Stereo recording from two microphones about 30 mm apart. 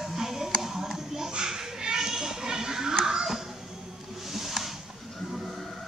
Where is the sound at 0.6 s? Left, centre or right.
Centre.